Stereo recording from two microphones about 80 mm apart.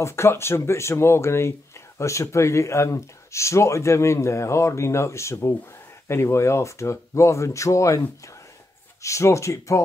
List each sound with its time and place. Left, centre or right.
0.0 s speech: left
9.0 s speech: left